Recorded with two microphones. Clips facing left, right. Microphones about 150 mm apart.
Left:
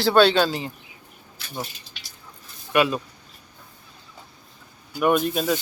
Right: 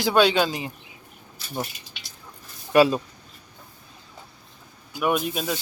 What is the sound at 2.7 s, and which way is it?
Speech, 30° right (ahead or behind).